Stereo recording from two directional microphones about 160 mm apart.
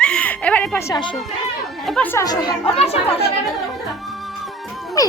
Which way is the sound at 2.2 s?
25° left (ahead or behind).